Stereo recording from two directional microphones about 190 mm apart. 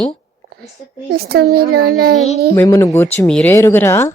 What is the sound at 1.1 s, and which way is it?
A child's voice, 55° right (ahead or behind).